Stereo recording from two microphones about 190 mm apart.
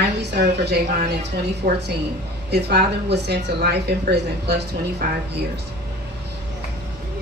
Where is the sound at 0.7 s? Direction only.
60° right (ahead or behind).